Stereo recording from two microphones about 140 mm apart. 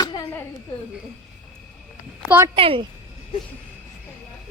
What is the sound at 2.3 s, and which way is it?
Speech, 15° right (ahead or behind).